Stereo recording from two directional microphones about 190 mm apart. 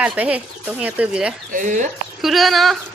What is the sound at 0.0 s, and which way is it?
Speech, 5° right (ahead or behind).